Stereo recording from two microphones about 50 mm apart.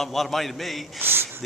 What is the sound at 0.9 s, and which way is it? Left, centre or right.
Speech, right.